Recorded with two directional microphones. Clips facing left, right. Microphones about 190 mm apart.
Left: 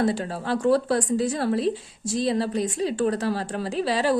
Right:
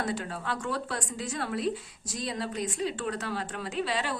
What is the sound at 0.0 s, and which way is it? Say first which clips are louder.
Speech: left 8 dB; 30° left (ahead or behind).